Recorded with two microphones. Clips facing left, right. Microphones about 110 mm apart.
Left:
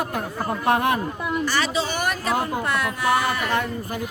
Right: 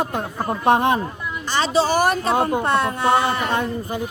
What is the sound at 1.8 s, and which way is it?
Speech, 35° right (ahead or behind).